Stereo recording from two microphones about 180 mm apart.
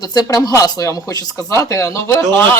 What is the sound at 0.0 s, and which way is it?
Speech, 20° left (ahead or behind).